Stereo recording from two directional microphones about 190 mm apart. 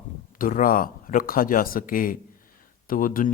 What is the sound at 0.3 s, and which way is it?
Speech, 45° left (ahead or behind).